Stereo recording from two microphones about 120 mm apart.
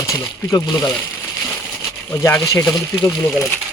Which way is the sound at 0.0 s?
30° left (ahead or behind).